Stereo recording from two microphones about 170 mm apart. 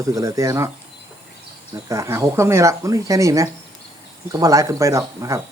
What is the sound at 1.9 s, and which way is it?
Speech, 20° right (ahead or behind).